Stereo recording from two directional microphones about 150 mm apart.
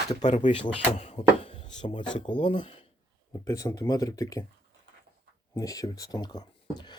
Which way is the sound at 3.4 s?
20° left (ahead or behind).